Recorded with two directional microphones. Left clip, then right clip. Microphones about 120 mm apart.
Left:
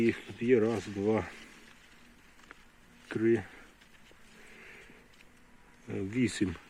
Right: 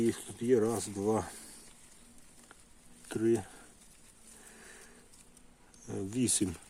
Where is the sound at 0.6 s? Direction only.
10° left (ahead or behind).